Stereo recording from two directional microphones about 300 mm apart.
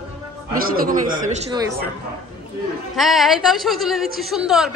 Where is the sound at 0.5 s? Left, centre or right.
Right.